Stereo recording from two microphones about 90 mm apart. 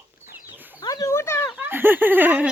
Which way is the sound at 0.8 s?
40° left (ahead or behind).